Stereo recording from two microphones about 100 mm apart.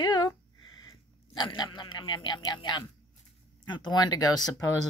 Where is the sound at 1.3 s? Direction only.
45° left (ahead or behind).